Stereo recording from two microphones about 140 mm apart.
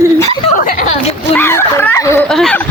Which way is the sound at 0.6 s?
75° left (ahead or behind).